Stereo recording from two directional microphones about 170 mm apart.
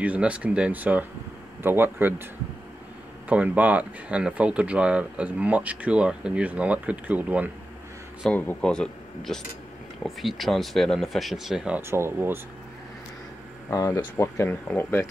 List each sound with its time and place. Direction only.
0.0 s speech: 10° right (ahead or behind)
3.3 s speech: 10° right (ahead or behind)
8.3 s speech: 10° left (ahead or behind); by 12.4 s 15° right (ahead or behind)
13.7 s speech: 20° left (ahead or behind)